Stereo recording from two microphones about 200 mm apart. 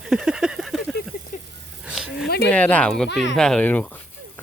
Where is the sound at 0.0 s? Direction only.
5° right (ahead or behind).